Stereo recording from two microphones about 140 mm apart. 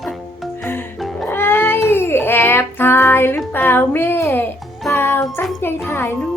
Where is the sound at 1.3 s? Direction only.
15° left (ahead or behind).